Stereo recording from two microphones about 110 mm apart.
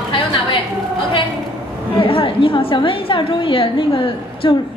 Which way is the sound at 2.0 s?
55° left (ahead or behind).